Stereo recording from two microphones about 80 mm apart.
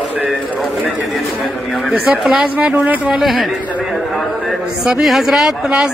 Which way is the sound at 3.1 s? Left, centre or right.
Centre.